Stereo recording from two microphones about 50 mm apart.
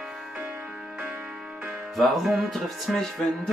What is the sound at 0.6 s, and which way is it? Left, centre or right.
Music, centre.